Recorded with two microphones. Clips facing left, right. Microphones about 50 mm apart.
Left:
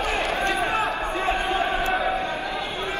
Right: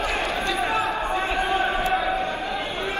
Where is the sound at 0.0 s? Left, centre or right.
Left.